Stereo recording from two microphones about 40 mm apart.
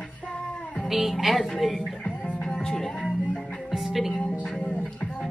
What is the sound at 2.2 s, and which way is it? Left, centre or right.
Music, centre.